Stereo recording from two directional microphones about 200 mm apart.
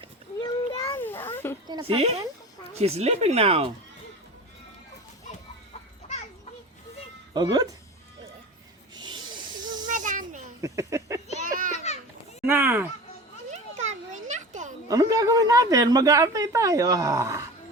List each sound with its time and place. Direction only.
0.3 s children playing: 20° left (ahead or behind)
1.6 s a woman's voice: 25° right (ahead or behind)
7.3 s speech: 20° right (ahead or behind)
9.0 s snake: 20° right (ahead or behind)
9.8 s snake: 40° right (ahead or behind)
10.6 s a woman's voice: 15° right (ahead or behind)
11.3 s children playing: 45° right (ahead or behind)
11.7 s children playing: 35° left (ahead or behind)
12.5 s a woman's voice: 10° right (ahead or behind)
13.5 s children playing: 35° right (ahead or behind)
14.8 s a woman's voice: 15° right (ahead or behind)